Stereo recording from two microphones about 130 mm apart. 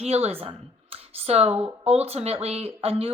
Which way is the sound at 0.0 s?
50° right (ahead or behind).